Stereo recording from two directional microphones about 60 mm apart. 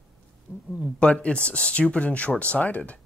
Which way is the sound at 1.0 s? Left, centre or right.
Centre.